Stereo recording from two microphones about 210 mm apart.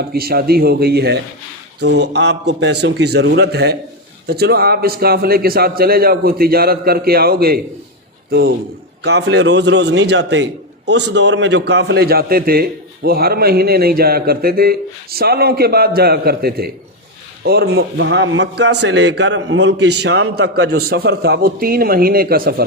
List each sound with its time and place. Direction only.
0.1 s a man's voice: 45° right (ahead or behind)